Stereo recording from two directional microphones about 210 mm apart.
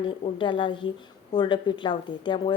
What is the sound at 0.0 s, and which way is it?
A woman's voice, 25° left (ahead or behind).